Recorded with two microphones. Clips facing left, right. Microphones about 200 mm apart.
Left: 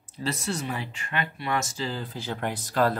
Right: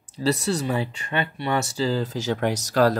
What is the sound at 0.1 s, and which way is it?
Speech, 35° right (ahead or behind).